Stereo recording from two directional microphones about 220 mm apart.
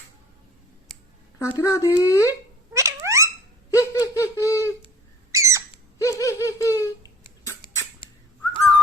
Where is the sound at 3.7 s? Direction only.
15° left (ahead or behind).